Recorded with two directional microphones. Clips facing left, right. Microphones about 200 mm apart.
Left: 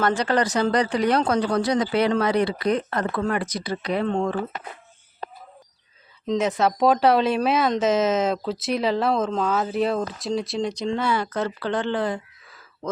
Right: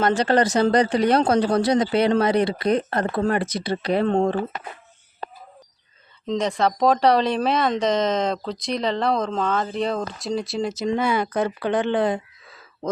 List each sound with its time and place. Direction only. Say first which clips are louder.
0.0 s speech: right 3 dB; 25° right (ahead or behind)
6.2 s speech: even; 5° left (ahead or behind)
10.8 s speech: right 4 dB; 15° right (ahead or behind)